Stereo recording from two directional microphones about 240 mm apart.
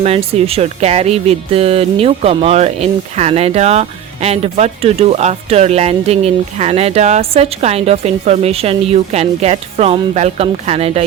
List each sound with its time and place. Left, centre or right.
0.0 s speech: right